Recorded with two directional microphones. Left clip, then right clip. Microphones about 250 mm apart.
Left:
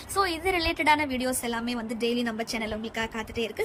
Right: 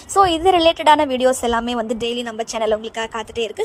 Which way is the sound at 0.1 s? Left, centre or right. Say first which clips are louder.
Right 12 dB; right.